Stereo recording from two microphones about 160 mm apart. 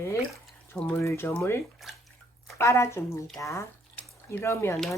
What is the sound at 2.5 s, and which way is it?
Speech, 15° left (ahead or behind).